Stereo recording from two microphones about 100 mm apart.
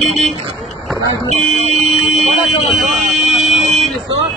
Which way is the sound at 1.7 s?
Centre (ahead or behind).